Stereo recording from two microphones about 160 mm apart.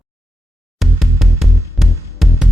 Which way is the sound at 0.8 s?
Centre (ahead or behind).